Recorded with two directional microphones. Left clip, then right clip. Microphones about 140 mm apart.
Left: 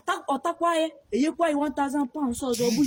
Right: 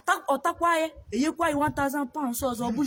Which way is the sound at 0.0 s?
35° right (ahead or behind).